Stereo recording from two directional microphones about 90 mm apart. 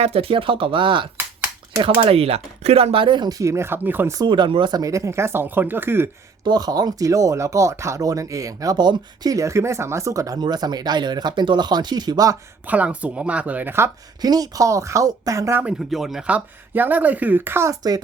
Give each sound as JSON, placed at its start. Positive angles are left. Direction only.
{"t": 0.1, "sound": "speech", "side_deg": -90}
{"t": 2.0, "sound": "speech", "side_deg": -90}
{"t": 2.7, "sound": "speech", "side_deg": -75}
{"t": 3.2, "sound": "speech", "side_deg": -40}
{"t": 4.3, "sound": "speech", "side_deg": -65}
{"t": 4.8, "sound": "speech", "side_deg": -35}
{"t": 6.4, "sound": "speech", "side_deg": -45}
{"t": 10.4, "sound": "speech", "side_deg": -50}
{"t": 12.6, "sound": "speech", "side_deg": -15}
{"t": 14.2, "sound": "speech", "side_deg": -45}
{"t": 15.9, "sound": "speech", "side_deg": 0}
{"t": 16.2, "sound": "speech", "side_deg": -20}